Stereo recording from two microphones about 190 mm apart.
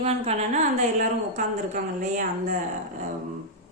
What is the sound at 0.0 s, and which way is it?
Speech, 35° right (ahead or behind).